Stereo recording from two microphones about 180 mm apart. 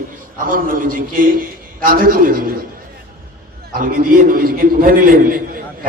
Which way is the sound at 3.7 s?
55° right (ahead or behind).